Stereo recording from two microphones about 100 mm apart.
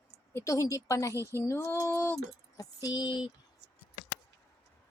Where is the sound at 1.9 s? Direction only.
15° left (ahead or behind).